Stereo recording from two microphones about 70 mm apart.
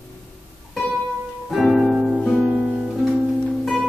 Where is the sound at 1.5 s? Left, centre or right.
Centre.